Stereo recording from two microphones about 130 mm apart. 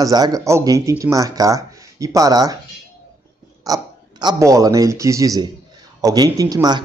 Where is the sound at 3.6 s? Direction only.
30° right (ahead or behind).